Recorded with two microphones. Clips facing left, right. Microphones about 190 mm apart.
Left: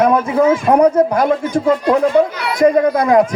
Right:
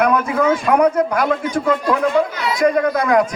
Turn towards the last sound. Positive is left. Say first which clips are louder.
# left 4 dB
turn(degrees=30)  # may be behind; listen again after turning